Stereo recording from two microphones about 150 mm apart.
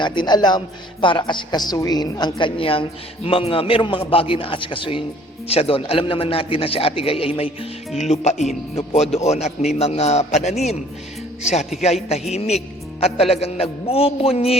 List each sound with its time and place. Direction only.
0.0 s a woman's voice: 30° left (ahead or behind); by 10.8 s 45° left (ahead or behind)
12.3 s a man's voice: 45° left (ahead or behind)